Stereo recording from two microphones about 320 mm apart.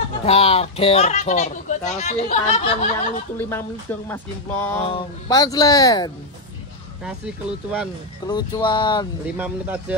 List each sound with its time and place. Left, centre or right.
0.2 s speech: centre
3.3 s speech: centre
7.1 s speech: centre
8.3 s speech: centre
9.4 s speech: centre